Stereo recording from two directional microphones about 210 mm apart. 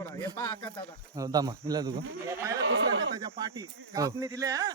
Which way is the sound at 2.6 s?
65° right (ahead or behind).